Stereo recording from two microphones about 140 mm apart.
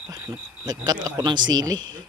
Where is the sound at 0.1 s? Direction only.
30° right (ahead or behind).